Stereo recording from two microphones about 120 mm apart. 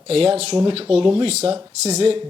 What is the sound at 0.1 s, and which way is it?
Speech, 55° right (ahead or behind).